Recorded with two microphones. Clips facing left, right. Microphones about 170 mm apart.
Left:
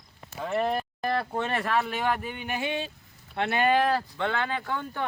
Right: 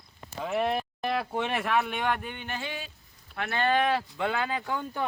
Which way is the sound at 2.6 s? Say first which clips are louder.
Left 6 dB; 25° left (ahead or behind).